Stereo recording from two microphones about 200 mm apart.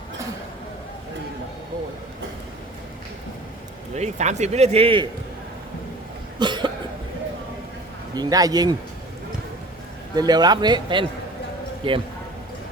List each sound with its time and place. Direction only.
3.9 s a man's voice: 35° right (ahead or behind)
6.4 s cough: 20° right (ahead or behind)
8.1 s a man's voice: 20° right (ahead or behind)
10.2 s a man's voice: 20° right (ahead or behind)